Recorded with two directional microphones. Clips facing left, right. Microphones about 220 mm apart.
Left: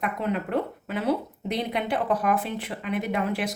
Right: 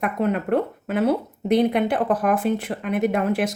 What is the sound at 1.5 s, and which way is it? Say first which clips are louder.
Speech: right 9 dB; 50° right (ahead or behind).